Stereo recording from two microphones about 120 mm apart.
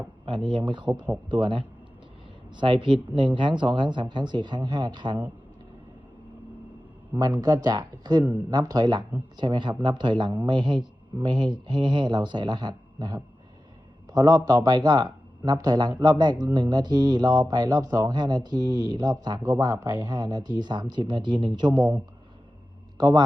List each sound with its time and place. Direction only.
0.5 s speech: 40° right (ahead or behind)
7.4 s speech: 35° right (ahead or behind)
23.0 s speech: 35° right (ahead or behind)